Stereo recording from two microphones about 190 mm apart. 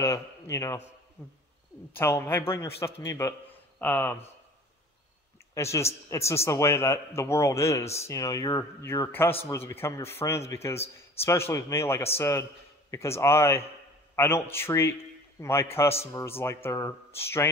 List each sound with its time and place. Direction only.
0.0 s a man's voice: 15° left (ahead or behind)
5.5 s speech: 15° left (ahead or behind)
15.9 s a man's voice: 30° left (ahead or behind)
16.2 s speech: 15° left (ahead or behind)